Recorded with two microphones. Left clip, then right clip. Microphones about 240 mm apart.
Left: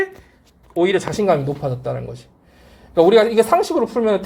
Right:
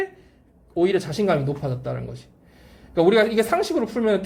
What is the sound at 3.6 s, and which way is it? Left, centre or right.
Speech, centre.